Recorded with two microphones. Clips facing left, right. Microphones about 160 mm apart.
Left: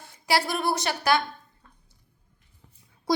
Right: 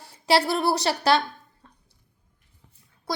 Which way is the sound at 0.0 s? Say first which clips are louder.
Right 4 dB; 30° right (ahead or behind).